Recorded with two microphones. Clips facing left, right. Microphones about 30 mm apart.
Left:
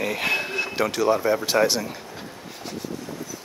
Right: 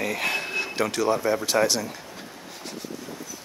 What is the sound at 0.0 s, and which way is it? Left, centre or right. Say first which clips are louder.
Speech: left 2 dB; centre.